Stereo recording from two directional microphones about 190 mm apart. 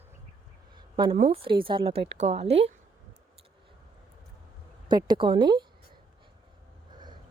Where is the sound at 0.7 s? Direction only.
25° right (ahead or behind).